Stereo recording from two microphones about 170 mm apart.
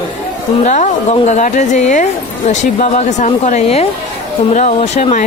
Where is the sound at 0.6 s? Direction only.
45° left (ahead or behind).